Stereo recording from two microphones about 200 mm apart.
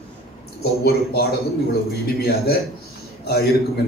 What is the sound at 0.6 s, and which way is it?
A man's voice, 50° left (ahead or behind).